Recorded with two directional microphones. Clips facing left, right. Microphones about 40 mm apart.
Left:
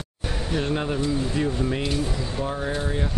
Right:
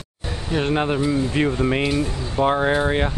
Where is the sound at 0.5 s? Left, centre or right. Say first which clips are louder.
Right 5 dB; right.